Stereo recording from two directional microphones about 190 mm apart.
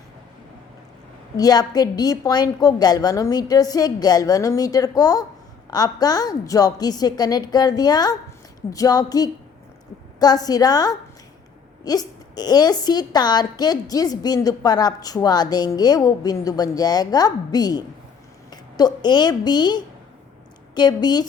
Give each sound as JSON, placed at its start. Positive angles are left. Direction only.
{"t": 1.4, "sound": "a woman's voice", "side_deg": 20}